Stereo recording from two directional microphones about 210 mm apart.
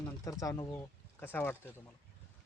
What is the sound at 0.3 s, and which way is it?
Speech, 15° left (ahead or behind).